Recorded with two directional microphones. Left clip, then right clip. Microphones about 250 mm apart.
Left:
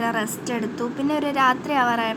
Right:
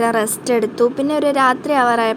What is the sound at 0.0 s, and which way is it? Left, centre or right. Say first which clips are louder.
A woman's voice: right 7 dB; centre.